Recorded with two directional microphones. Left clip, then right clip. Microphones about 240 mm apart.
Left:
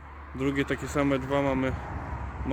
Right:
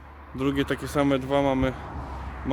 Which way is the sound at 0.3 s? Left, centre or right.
Centre.